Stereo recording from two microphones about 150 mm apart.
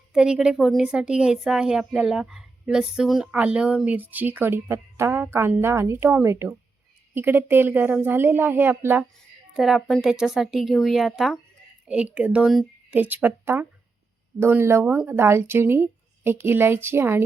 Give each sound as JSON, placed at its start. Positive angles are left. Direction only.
{"t": 0.1, "sound": "a woman's voice", "side_deg": -5}
{"t": 9.6, "sound": "a woman's voice", "side_deg": 0}